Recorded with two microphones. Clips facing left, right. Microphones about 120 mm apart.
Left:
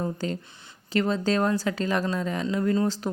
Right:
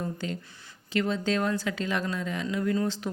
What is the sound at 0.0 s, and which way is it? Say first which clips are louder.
A woman's voice: left 4 dB; 40° left (ahead or behind).